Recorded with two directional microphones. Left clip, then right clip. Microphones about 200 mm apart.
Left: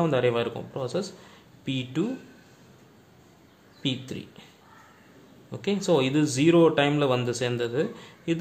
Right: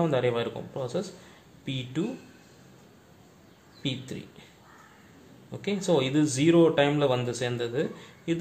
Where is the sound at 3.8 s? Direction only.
20° left (ahead or behind).